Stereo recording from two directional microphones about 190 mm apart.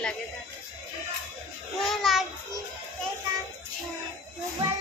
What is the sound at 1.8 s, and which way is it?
Child singing, centre (ahead or behind).